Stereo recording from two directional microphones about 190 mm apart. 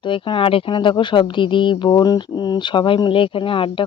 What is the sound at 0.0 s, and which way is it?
Speech, 25° left (ahead or behind).